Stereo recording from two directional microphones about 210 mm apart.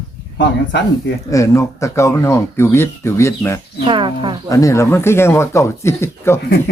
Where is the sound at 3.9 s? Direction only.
25° right (ahead or behind).